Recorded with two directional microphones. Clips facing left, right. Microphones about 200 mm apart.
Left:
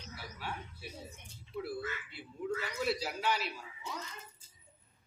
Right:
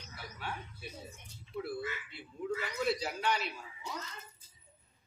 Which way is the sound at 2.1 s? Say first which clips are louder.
Even; centre (ahead or behind).